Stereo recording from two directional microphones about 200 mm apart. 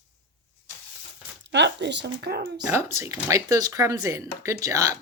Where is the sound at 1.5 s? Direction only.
60° right (ahead or behind).